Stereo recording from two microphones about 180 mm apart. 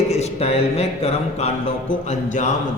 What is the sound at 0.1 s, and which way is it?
A man's voice, 35° left (ahead or behind).